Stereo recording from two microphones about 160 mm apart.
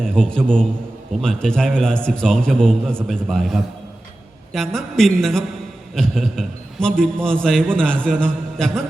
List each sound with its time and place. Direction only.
0.0 s a man's voice: 5° left (ahead or behind)